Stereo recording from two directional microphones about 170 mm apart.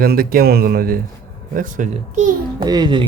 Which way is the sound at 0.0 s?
60° right (ahead or behind).